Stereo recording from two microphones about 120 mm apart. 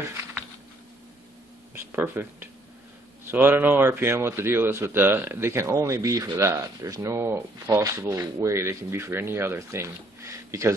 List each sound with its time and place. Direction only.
1.9 s a man's voice: 20° right (ahead or behind)